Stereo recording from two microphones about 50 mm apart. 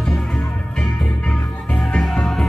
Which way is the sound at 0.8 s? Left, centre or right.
Centre.